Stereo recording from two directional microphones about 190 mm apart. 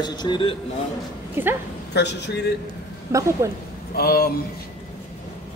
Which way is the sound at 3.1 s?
15° right (ahead or behind).